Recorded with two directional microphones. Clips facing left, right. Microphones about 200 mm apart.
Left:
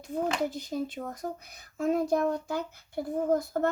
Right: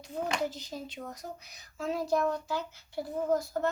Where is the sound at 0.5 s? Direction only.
55° left (ahead or behind).